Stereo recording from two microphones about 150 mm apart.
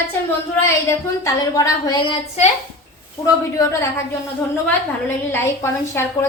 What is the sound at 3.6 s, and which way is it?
A woman's voice, 20° left (ahead or behind).